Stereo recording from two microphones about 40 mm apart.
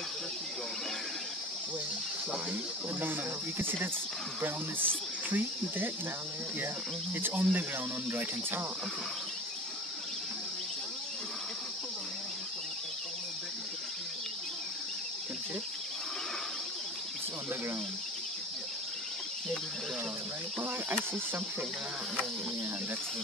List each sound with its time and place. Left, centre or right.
3.0 s speech: right
7.2 s speech: right